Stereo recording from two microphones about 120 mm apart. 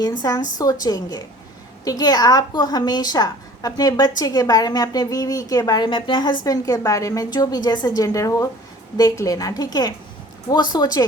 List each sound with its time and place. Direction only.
0.0 s a woman's voice: 35° left (ahead or behind)